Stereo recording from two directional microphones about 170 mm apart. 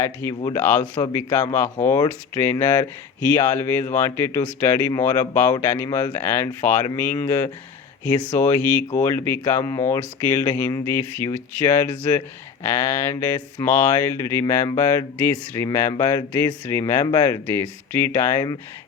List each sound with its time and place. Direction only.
0.0 s speech: 15° left (ahead or behind)